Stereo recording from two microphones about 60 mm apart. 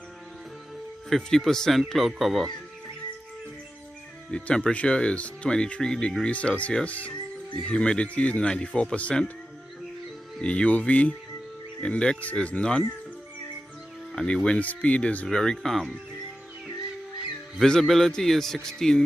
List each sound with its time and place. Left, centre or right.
1.1 s speech: centre
4.3 s speech: centre
10.4 s speech: centre
14.1 s speech: centre
15.2 s speech: centre
17.6 s speech: centre